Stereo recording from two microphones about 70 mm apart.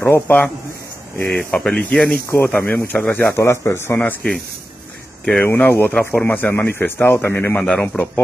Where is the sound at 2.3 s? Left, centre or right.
Left.